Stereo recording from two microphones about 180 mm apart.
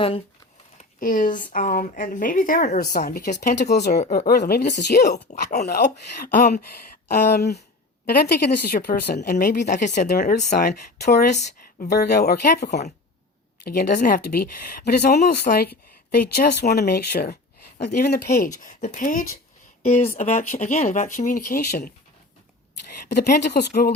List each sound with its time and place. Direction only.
0.8 s a woman's voice: 50° left (ahead or behind); by 5.2 s 65° left (ahead or behind)
5.3 s speech: 40° left (ahead or behind)
5.6 s speech: 65° left (ahead or behind)
6.2 s a woman's voice: 45° left (ahead or behind)
7.3 s speech: 65° left (ahead or behind); by 10.4 s 45° left (ahead or behind)
10.5 s speech: 60° left (ahead or behind)
13.9 s speech: 50° left (ahead or behind)
18.3 s a woman's voice: 45° left (ahead or behind)
19.8 s a woman's voice: 35° left (ahead or behind); by 21.9 s 60° left (ahead or behind)
23.1 s speech: 65° left (ahead or behind)